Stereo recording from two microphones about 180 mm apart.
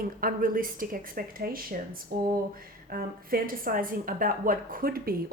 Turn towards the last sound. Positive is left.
turn(degrees=-55)  # may be behind; listen again after turning